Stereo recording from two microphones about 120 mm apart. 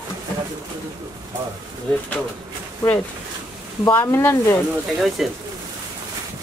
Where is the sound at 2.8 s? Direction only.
30° left (ahead or behind).